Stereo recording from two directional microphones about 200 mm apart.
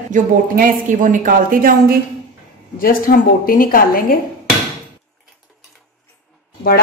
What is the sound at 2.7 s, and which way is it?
A woman's voice, 45° left (ahead or behind).